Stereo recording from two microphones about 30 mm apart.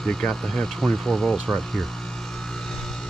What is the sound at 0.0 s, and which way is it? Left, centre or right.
Speech, left.